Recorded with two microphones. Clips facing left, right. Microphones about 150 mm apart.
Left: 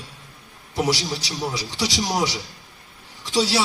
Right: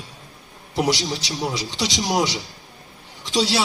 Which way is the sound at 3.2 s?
25° right (ahead or behind).